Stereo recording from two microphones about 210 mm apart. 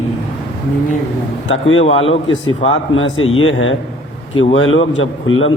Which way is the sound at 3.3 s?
70° left (ahead or behind).